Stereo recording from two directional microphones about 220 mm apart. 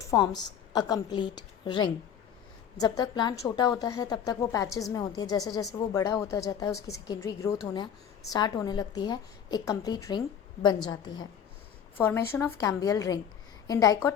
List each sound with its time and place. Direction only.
0.0 s a woman's voice: 15° left (ahead or behind)